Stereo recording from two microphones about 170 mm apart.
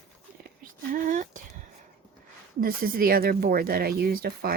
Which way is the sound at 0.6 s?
50° right (ahead or behind).